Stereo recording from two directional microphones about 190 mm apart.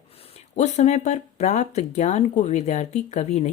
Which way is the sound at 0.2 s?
35° left (ahead or behind).